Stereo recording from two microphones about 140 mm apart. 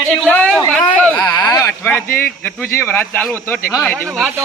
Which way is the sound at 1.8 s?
15° left (ahead or behind).